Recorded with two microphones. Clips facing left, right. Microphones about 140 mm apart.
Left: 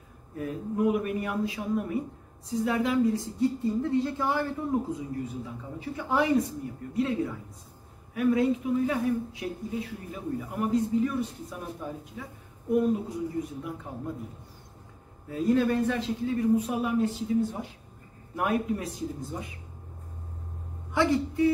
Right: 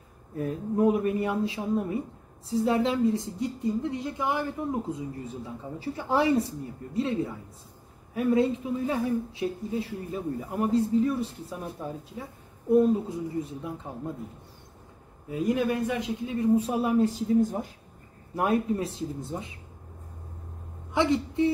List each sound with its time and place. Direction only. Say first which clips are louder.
0.4 s a man's voice: right 3 dB; 35° right (ahead or behind); by 4.5 s 15° right (ahead or behind)
4.9 s a man's voice: left 2 dB; 30° right (ahead or behind)
15.2 s a man's voice: left 2 dB; 15° right (ahead or behind); by 17.6 s 40° right (ahead or behind)
18.3 s a man's voice: right 2 dB; 30° right (ahead or behind)
20.9 s a woman's voice: even; 20° right (ahead or behind)